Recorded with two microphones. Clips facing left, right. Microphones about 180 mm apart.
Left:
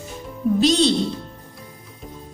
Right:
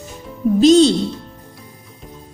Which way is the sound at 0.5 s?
40° right (ahead or behind).